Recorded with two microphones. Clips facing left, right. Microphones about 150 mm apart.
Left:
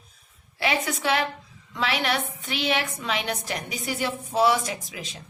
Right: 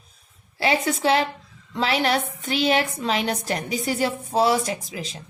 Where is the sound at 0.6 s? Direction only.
30° right (ahead or behind).